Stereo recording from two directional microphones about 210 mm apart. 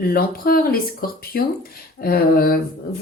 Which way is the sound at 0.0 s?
45° left (ahead or behind).